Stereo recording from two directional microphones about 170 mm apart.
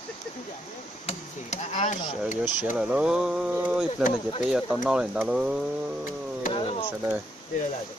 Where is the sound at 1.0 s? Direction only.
35° left (ahead or behind).